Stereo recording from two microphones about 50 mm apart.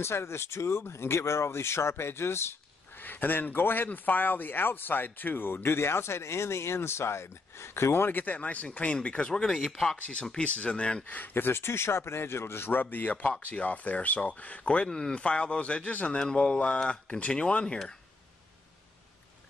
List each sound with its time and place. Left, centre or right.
0.0 s speech: left
3.0 s speech: left
8.1 s speech: left
9.3 s speech: centre
9.9 s speech: left
11.1 s speech: left
14.9 s speech: centre; by 16.2 s left
16.2 s speech: centre